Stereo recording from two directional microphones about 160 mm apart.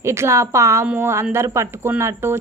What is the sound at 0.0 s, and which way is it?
Speech, 15° right (ahead or behind).